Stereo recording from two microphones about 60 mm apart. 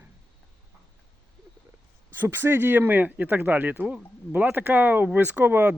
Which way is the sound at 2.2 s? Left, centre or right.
Right.